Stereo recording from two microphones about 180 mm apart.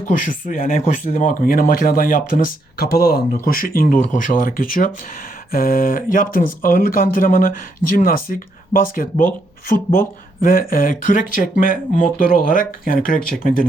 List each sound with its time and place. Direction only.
0.0 s speech: 50° left (ahead or behind)